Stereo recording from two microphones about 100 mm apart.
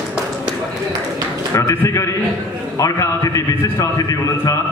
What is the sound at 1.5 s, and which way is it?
A man's voice, 35° left (ahead or behind).